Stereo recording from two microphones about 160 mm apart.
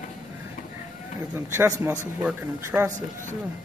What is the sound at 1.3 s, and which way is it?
A man's voice, 15° right (ahead or behind).